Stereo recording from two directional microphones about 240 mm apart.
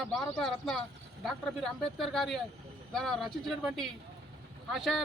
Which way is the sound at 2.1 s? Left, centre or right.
Centre.